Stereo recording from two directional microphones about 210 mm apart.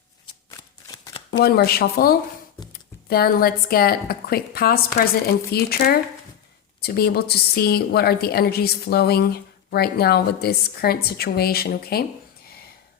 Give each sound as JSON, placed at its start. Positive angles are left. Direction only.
{"t": 0.5, "sound": "shuffling cards", "side_deg": 15}
{"t": 1.3, "sound": "a woman's voice", "side_deg": 50}